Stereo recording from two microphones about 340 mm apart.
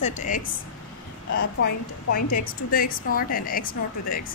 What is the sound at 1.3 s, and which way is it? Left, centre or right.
Speech, left.